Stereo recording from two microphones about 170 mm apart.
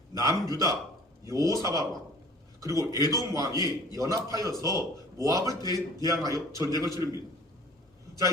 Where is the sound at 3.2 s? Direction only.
20° right (ahead or behind).